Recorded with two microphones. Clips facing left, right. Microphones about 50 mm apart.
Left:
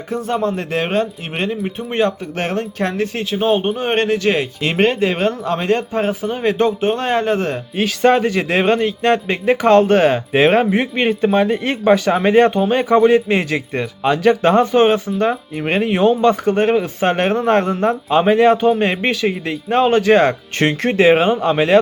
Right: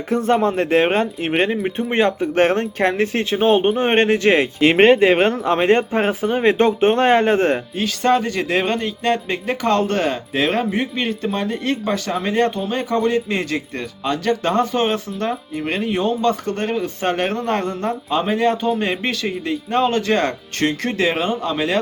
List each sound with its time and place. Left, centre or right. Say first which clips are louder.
0.1 s speech: right 2 dB; right
3.3 s speech: right 1 dB; right
7.8 s a man's voice: left 6 dB; centre
10.3 s a man's voice: left 5 dB; left
12.0 s speech: left 7 dB; left
13.0 s a man's voice: left 5 dB; centre
18.1 s speech: left 6 dB; left